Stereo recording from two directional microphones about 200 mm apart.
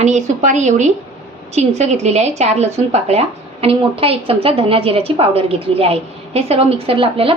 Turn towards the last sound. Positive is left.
turn(degrees=-25)  # may be behind; listen again after turning